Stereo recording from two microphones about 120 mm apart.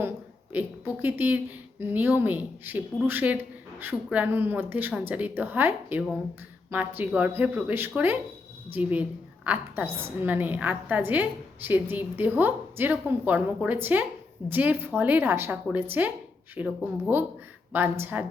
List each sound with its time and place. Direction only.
0.5 s a woman's voice: 15° right (ahead or behind)